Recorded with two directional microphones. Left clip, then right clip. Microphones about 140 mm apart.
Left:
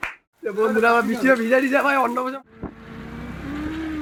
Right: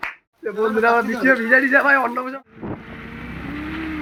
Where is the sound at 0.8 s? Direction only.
10° left (ahead or behind).